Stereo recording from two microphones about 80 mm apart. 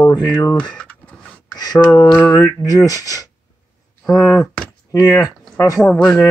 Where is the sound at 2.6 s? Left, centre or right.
Left.